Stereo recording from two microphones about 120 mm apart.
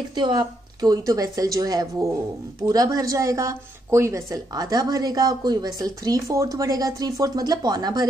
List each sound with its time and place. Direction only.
0.1 s a woman's voice: 40° right (ahead or behind)